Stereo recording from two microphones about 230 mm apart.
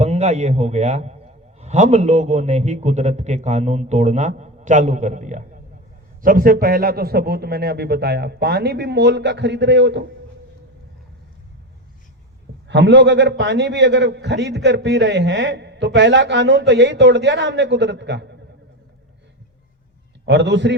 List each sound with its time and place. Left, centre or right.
0.0 s a man's voice: right
12.6 s a man's voice: right
20.2 s a man's voice: right